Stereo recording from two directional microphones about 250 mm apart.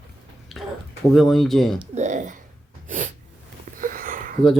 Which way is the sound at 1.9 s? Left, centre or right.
Right.